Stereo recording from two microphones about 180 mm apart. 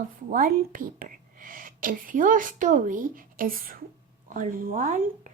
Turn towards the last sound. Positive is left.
turn(degrees=-50)  # may be behind; listen again after turning